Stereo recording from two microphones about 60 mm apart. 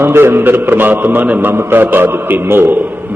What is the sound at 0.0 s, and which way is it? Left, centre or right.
A man's voice, right.